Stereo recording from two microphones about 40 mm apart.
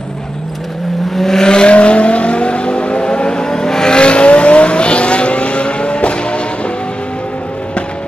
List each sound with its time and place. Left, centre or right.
1.1 s vehicle: centre; by 6.7 s left